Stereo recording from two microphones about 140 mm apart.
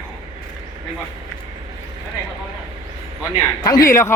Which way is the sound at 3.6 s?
25° left (ahead or behind).